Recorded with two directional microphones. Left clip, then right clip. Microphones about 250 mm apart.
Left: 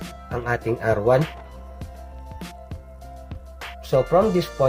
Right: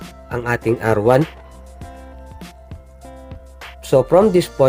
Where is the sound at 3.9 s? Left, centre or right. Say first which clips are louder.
Right 5 dB; right.